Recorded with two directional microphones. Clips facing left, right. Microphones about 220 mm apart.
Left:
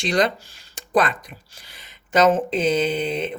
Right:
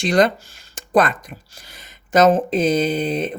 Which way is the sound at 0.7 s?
45° right (ahead or behind).